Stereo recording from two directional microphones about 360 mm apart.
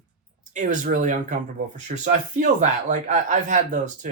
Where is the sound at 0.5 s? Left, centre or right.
Right.